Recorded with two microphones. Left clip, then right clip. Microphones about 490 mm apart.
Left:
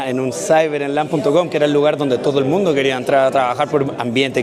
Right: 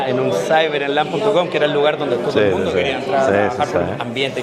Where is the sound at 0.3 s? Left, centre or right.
Left.